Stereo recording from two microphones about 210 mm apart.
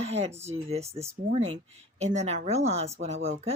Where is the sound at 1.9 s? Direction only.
30° right (ahead or behind).